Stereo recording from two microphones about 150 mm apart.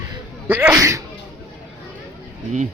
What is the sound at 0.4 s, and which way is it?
Speech, 10° right (ahead or behind).